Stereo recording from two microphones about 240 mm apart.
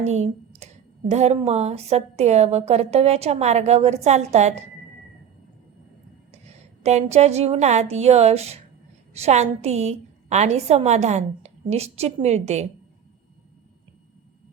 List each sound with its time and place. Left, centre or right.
0.0 s speech: right
6.3 s a woman's voice: right